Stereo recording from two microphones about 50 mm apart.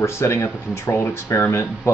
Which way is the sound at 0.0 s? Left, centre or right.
Left.